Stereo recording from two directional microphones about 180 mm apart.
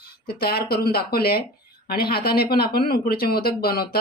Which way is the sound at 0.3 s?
60° left (ahead or behind).